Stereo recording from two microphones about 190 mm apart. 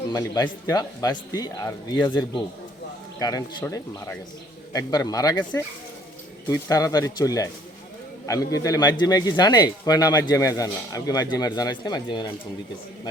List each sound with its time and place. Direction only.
0.1 s speech: 20° left (ahead or behind)
5.4 s speech: 10° left (ahead or behind)